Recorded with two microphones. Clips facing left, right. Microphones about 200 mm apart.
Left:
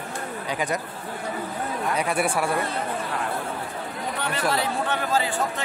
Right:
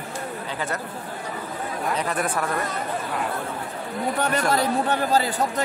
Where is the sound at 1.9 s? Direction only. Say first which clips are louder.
Left 2 dB; 10° left (ahead or behind).